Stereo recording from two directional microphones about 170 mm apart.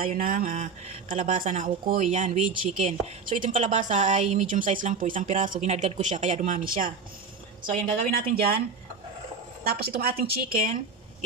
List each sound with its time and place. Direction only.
0.1 s a woman's voice: 55° right (ahead or behind)
9.7 s a woman's voice: 65° right (ahead or behind)